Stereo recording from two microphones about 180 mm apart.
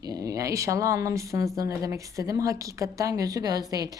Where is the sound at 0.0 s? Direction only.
20° right (ahead or behind).